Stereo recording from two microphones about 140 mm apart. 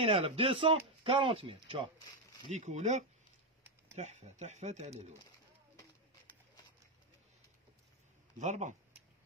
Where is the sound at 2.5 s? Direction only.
55° right (ahead or behind).